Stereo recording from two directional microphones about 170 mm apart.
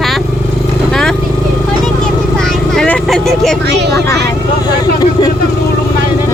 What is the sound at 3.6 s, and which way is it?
Speech, 80° right.